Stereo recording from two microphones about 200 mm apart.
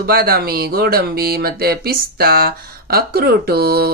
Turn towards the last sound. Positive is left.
turn(degrees=-50)  # may be behind; listen again after turning